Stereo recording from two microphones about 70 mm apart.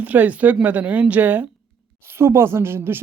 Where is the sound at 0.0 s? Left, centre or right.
Right.